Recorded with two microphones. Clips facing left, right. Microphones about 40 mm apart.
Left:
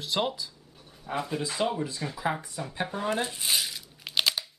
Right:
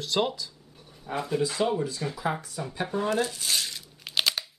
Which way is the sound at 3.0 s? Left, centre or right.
Left.